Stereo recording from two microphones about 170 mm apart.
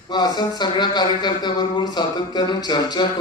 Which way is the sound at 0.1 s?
25° left (ahead or behind).